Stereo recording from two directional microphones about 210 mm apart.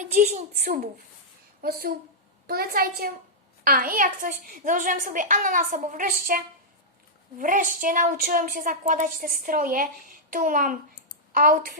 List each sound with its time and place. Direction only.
0.0 s a woman's voice: 35° right (ahead or behind)
0.6 s a woman's voice: 45° right (ahead or behind)
7.3 s a woman's voice: 40° right (ahead or behind)